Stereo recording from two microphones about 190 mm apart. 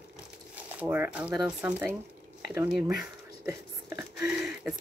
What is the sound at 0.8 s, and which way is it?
Speech, 10° right (ahead or behind).